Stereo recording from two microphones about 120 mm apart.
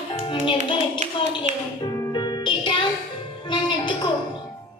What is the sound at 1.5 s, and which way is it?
Music, 75° right (ahead or behind).